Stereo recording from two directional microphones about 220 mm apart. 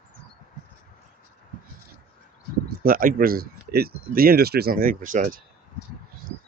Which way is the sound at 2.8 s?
40° right (ahead or behind).